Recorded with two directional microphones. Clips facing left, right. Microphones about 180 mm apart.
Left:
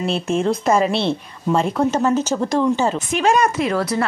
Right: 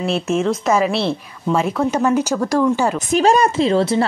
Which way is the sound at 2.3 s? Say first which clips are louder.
Right 2 dB; 15° left (ahead or behind).